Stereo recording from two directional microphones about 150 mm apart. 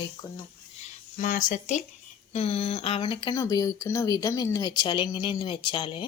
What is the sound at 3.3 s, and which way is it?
A woman's voice, 25° left (ahead or behind).